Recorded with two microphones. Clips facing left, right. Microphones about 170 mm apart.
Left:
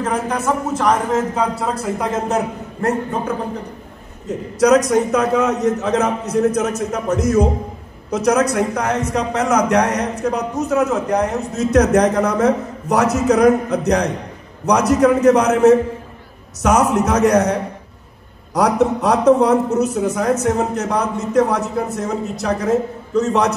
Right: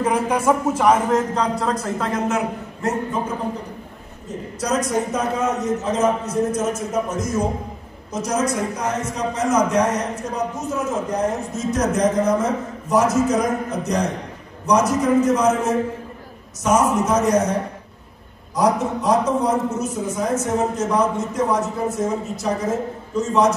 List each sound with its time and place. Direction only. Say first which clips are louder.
0.0 s speech: right 1 dB; 10° right (ahead or behind)
1.1 s speech: left 1 dB; 5° left (ahead or behind)
2.1 s a man's voice: left 2 dB; 35° left (ahead or behind)
2.8 s a man's voice: left 5 dB; 55° left (ahead or behind)
4.6 s a man's voice: left 9 dB; 75° left (ahead or behind)